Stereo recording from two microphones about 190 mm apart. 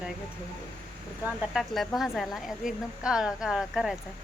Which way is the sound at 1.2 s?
5° right (ahead or behind).